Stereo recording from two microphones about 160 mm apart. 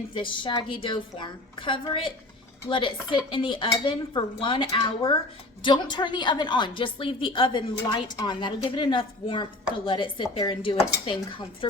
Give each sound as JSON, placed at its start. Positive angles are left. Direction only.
{"t": 0.1, "sound": "a woman's voice", "side_deg": 30}